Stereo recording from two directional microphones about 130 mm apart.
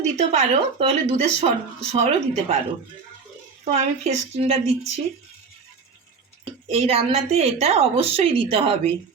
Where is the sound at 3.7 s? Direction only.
55° right (ahead or behind).